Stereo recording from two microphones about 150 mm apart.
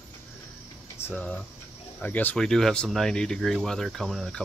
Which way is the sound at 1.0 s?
10° left (ahead or behind).